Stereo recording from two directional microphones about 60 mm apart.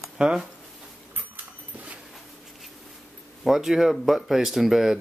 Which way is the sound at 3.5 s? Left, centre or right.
Centre.